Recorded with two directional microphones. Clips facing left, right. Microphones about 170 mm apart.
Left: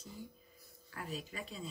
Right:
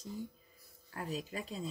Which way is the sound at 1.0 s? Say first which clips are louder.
Right 4 dB; 40° right (ahead or behind).